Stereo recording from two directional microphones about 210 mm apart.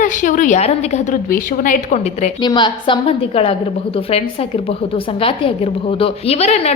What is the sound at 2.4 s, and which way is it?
A woman's voice, 20° left (ahead or behind).